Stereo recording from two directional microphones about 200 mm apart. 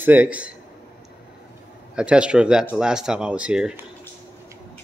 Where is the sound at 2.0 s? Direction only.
5° right (ahead or behind).